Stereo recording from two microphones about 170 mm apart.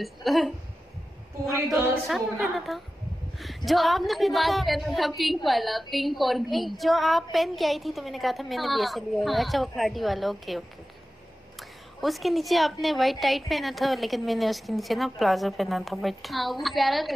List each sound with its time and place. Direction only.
0.0 s a woman's voice: centre (ahead or behind)
1.5 s speech: 20° right (ahead or behind)
2.4 s a woman's voice: centre (ahead or behind)
12.0 s a woman's voice: centre (ahead or behind)